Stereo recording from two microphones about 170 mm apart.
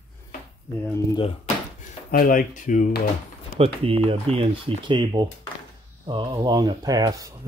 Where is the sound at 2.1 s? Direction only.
55° left (ahead or behind).